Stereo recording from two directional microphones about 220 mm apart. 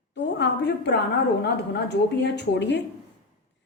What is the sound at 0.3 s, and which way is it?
A woman's voice, 55° left (ahead or behind).